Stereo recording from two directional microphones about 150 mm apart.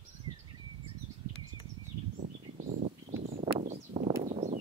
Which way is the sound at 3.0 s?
70° right (ahead or behind).